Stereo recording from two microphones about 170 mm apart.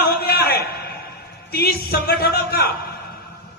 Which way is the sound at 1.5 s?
65° left (ahead or behind).